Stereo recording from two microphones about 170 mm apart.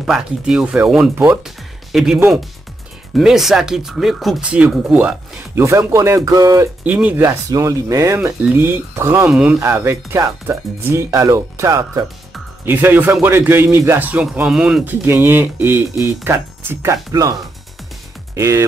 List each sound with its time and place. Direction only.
0.0 s speech: 5° right (ahead or behind)
2.1 s speech: 15° right (ahead or behind)
3.2 s speech: centre (ahead or behind); by 6.7 s 20° right (ahead or behind)
6.8 s speech: 10° right (ahead or behind)
15.0 s speech: 15° right (ahead or behind)
15.7 s speech: 20° left (ahead or behind)
16.3 s speech: 15° right (ahead or behind)